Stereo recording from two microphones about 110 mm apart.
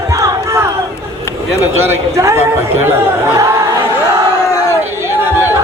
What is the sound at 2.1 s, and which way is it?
Speech, 25° right (ahead or behind).